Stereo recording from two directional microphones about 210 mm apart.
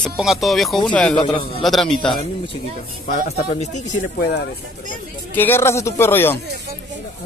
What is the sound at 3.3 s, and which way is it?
Speech, 30° left (ahead or behind).